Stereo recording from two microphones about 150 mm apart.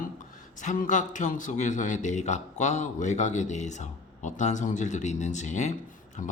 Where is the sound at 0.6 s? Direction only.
55° left (ahead or behind).